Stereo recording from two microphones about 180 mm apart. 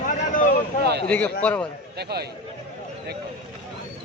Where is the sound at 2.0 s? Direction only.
65° right (ahead or behind).